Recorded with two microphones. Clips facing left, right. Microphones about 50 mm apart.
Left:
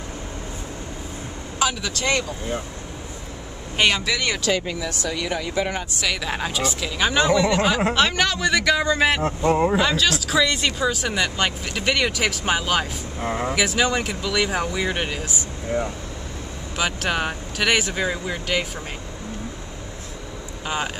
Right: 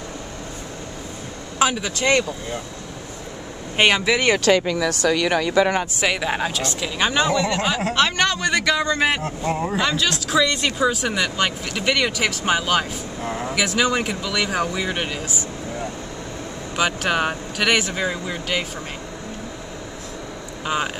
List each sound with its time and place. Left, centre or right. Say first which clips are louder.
1.6 s speech: right 3 dB; right
3.7 s speech: right 3 dB; right
4.2 s speech: right 6 dB; right
4.5 s speech: right 6 dB; right
5.9 s speech: right 4 dB; centre
6.5 s speech: even; centre
9.2 s speech: left 5 dB; left
10.1 s speech: right 1 dB; centre
13.2 s speech: left 3 dB; left
13.5 s speech: right 2 dB; centre
16.7 s speech: right 3 dB; centre
20.6 s speech: right 3 dB; centre